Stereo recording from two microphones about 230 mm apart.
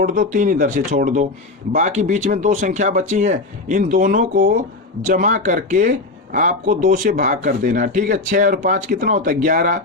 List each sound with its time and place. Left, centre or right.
0.0 s speech: right